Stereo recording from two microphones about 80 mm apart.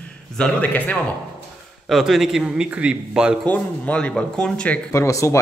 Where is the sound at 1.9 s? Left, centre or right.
Centre.